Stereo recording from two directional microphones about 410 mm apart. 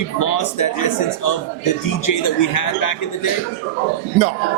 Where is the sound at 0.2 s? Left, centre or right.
Left.